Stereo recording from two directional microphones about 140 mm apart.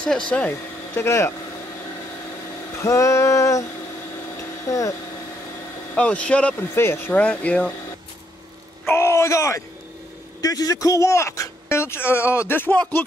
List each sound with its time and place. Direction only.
0.3 s speech: 10° left (ahead or behind)
2.8 s speech: 20° left (ahead or behind)
4.6 s speech: 25° left (ahead or behind)
5.9 s speech: 10° left (ahead or behind)
8.8 s a sound: 20° left (ahead or behind)
10.4 s speech: 25° left (ahead or behind)